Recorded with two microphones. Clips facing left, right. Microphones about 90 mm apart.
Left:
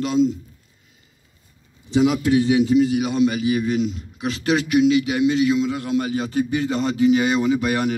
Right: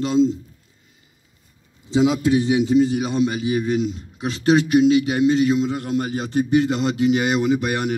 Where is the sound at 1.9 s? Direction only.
25° right (ahead or behind); by 6.1 s 40° right (ahead or behind).